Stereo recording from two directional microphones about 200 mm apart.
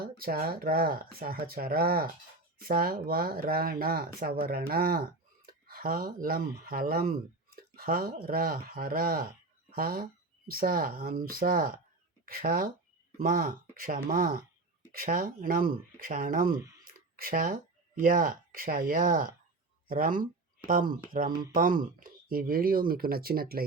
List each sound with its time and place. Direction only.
0.2 s speech: 50° right (ahead or behind)
16.6 s speech: 15° right (ahead or behind)
16.8 s a sound: 45° right (ahead or behind)
18.0 s speech: 45° right (ahead or behind)
21.2 s speech: 20° right (ahead or behind)
21.5 s speech: 45° right (ahead or behind)